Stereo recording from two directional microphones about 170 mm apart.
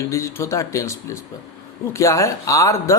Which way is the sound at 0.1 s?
15° left (ahead or behind).